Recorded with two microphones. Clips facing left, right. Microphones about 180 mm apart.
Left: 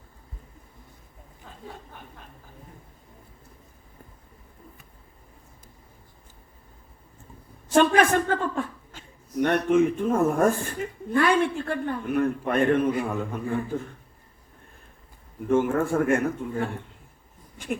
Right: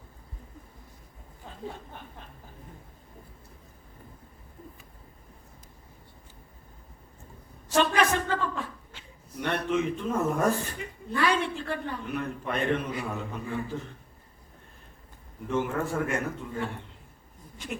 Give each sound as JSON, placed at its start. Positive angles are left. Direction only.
{"t": 7.7, "sound": "a woman's voice", "side_deg": 50}
{"t": 15.4, "sound": "a woman's voice", "side_deg": 50}